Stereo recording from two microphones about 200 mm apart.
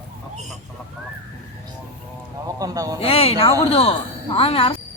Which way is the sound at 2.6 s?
20° right (ahead or behind).